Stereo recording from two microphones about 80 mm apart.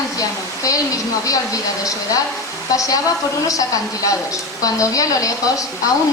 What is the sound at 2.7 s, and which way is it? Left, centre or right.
A woman's voice, left.